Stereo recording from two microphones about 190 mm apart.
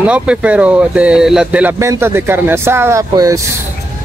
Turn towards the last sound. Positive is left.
turn(degrees=-15)  # may be behind; listen again after turning